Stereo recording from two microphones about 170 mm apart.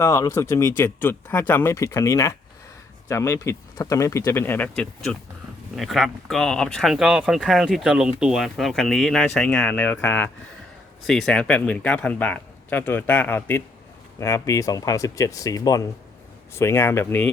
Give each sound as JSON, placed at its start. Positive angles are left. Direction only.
{"t": 0.0, "sound": "speech", "side_deg": 15}